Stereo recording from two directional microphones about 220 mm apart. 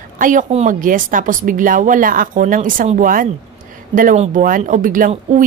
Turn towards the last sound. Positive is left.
turn(degrees=-40)  # may be behind; listen again after turning